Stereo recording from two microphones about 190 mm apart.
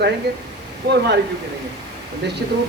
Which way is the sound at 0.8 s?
55° right (ahead or behind).